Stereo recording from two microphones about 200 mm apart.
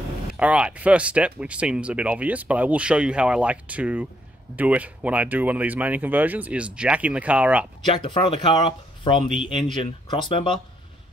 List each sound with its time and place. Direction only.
0.4 s speech: 5° right (ahead or behind)
7.9 s speech: 25° left (ahead or behind)